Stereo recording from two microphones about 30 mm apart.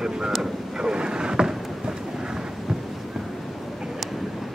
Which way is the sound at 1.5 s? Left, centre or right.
Right.